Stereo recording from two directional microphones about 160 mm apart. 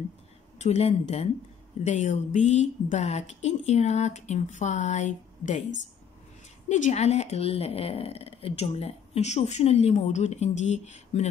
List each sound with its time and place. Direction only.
0.6 s a woman's voice: 40° left (ahead or behind)